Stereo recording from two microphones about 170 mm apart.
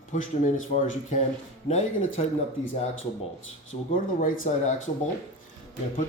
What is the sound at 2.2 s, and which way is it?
Speech, 35° left (ahead or behind).